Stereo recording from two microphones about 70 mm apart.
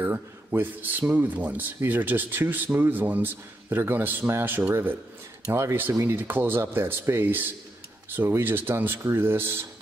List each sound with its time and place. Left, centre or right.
0.0 s a man's voice: right
5.5 s speech: right